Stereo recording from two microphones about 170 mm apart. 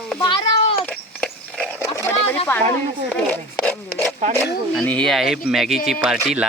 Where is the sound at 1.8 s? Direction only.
20° left (ahead or behind).